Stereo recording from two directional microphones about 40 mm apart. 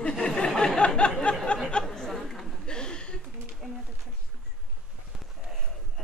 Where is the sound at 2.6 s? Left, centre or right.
Left.